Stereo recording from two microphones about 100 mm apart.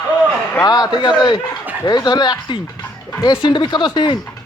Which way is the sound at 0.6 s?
40° left (ahead or behind).